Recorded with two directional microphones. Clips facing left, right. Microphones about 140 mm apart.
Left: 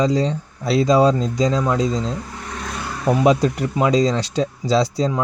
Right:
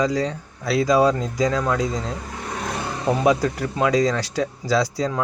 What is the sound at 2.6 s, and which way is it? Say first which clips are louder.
Vehicle: left 1 dB; 25° right (ahead or behind).